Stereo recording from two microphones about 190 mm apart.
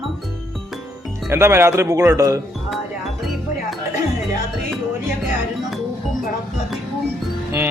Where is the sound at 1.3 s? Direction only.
15° right (ahead or behind).